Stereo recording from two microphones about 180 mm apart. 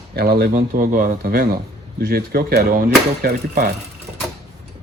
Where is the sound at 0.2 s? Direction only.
60° right (ahead or behind).